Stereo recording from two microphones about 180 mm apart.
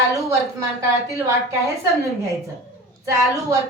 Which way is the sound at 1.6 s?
15° right (ahead or behind).